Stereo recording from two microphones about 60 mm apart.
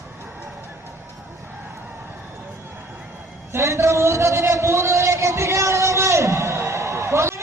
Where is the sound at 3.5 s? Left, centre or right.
Right.